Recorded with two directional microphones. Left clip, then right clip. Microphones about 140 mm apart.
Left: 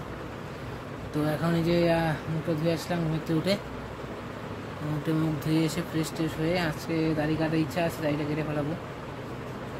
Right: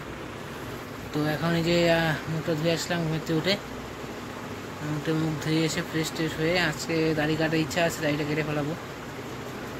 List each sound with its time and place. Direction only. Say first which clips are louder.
1.2 s speech: right 1 dB; 10° left (ahead or behind)
5.1 s speech: right 1 dB; 15° left (ahead or behind)
6.9 s speech: right 2 dB; centre (ahead or behind)